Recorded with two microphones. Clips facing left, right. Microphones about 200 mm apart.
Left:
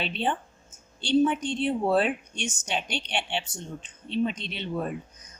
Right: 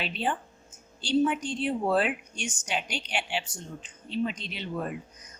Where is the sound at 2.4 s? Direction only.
25° left (ahead or behind).